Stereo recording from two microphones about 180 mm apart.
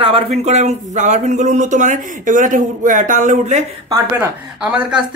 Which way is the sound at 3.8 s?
20° right (ahead or behind).